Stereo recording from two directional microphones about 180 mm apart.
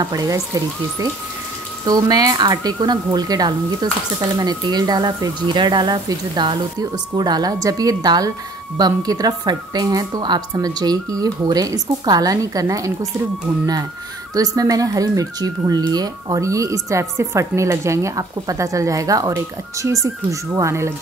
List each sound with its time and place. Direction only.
0.0 s a woman's voice: 20° right (ahead or behind)
1.9 s a woman's voice: 20° right (ahead or behind)
14.3 s a woman's voice: 20° right (ahead or behind)